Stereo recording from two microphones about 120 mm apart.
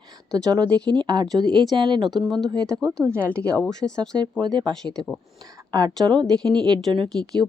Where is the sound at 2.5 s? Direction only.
35° right (ahead or behind).